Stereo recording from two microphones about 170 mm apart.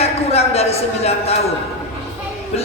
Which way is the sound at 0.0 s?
35° left (ahead or behind).